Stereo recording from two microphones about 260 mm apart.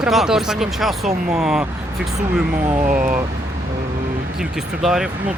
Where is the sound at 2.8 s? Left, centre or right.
Right.